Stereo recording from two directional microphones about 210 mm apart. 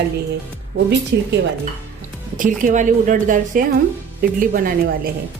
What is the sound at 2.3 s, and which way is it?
A woman's voice, 40° right (ahead or behind).